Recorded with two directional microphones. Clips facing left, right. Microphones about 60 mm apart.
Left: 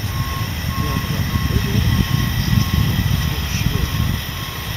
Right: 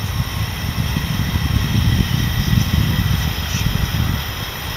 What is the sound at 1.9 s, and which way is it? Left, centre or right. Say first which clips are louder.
Vehicle: even; centre.